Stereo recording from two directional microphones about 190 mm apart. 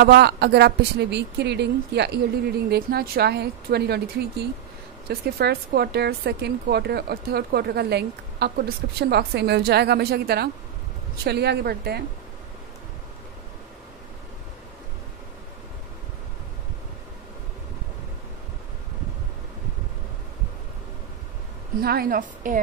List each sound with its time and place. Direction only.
0.0 s speech: 60° right (ahead or behind)
21.8 s a woman's voice: 50° right (ahead or behind)